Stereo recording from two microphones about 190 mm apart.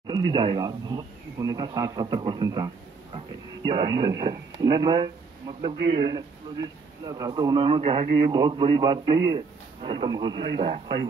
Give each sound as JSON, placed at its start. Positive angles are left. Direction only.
{"t": 0.0, "sound": "a man's voice", "side_deg": -25}
{"t": 3.7, "sound": "a man's voice", "side_deg": -20}